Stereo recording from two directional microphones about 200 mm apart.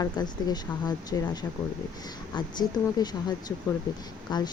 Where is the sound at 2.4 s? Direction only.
20° left (ahead or behind).